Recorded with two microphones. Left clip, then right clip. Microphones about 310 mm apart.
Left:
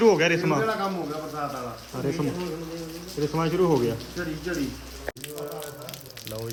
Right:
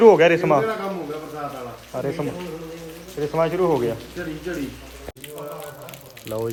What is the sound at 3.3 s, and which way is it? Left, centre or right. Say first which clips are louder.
Speech: right 4 dB; centre.